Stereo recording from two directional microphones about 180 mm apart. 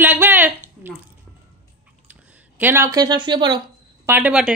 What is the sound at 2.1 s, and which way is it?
Speech, 10° right (ahead or behind).